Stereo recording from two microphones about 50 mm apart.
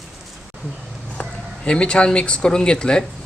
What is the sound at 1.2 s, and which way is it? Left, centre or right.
Speech, left.